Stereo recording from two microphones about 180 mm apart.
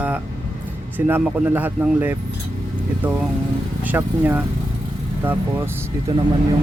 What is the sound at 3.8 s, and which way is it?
Speech, 10° right (ahead or behind).